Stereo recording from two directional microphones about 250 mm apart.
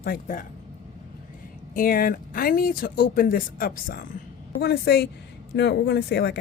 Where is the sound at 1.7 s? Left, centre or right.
Left.